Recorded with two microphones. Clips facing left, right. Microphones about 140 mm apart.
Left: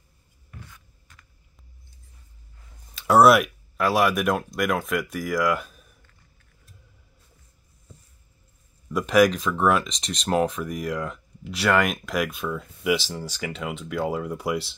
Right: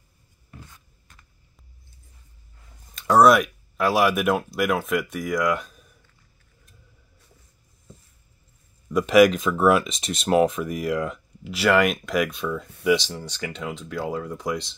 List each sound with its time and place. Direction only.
0.5 s writing: 20° right (ahead or behind)
2.9 s speech: 5° left (ahead or behind)
8.9 s speech: centre (ahead or behind)